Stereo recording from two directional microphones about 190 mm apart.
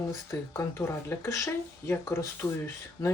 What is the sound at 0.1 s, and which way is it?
Speech, 15° left (ahead or behind).